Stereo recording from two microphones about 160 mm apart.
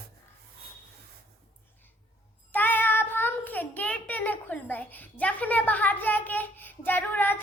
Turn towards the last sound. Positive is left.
turn(degrees=10)  # may be behind; listen again after turning